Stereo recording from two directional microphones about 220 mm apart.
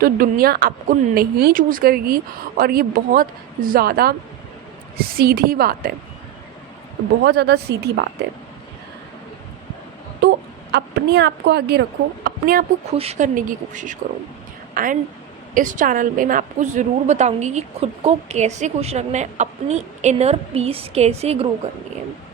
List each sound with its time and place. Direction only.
0.0 s a woman's voice: 40° right (ahead or behind)
7.3 s a woman's voice: 50° right (ahead or behind)
10.2 s a woman's voice: 50° right (ahead or behind)
12.9 s a woman's voice: 30° right (ahead or behind)